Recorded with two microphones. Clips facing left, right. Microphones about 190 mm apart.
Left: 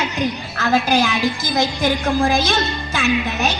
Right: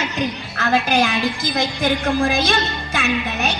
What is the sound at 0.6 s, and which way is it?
A woman's voice, 55° right (ahead or behind).